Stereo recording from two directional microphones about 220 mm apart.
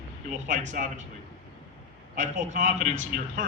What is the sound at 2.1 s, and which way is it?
Speech, 30° right (ahead or behind).